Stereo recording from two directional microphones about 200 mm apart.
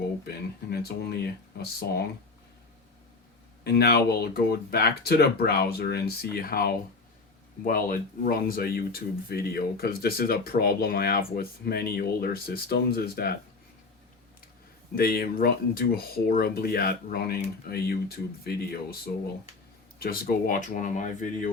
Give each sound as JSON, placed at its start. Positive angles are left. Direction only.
{"t": 0.3, "sound": "speech", "side_deg": 50}
{"t": 3.6, "sound": "speech", "side_deg": 50}
{"t": 14.9, "sound": "speech", "side_deg": 50}